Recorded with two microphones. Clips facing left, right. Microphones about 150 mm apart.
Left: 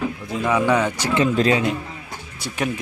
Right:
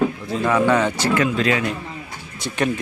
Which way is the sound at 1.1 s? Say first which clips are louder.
Left 4 dB; 30° left (ahead or behind).